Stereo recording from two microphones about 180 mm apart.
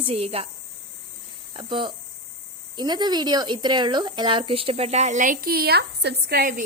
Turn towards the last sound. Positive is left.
turn(degrees=-60)  # may be behind; listen again after turning